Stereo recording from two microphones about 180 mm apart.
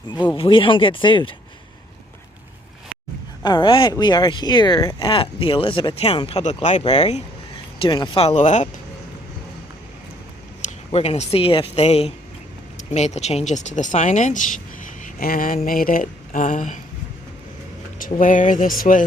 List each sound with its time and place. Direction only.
0.3 s speech: 30° left (ahead or behind)
3.4 s speech: 25° left (ahead or behind)
10.9 s speech: 35° left (ahead or behind)
15.0 s a sound: 50° left (ahead or behind)
18.1 s speech: 45° left (ahead or behind)